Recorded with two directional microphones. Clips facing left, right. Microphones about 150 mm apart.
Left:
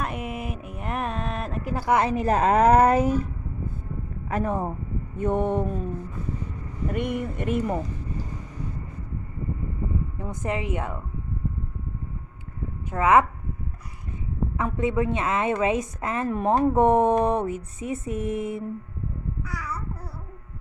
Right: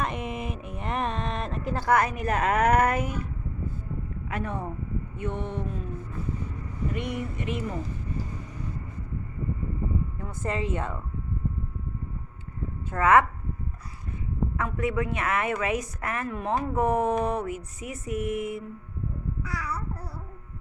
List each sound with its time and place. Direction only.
0.0 s a sound: 5° left (ahead or behind)
1.9 s a woman's voice: 25° left (ahead or behind)
4.3 s a woman's voice: 40° left (ahead or behind)
5.1 s a sound: 45° left (ahead or behind)
6.9 s a sound: 50° left (ahead or behind)
10.2 s a woman's voice: 15° left (ahead or behind)
12.9 s a woman's voice: 15° left (ahead or behind)
14.5 s speech: 20° left (ahead or behind)
16.3 s speech: 40° left (ahead or behind)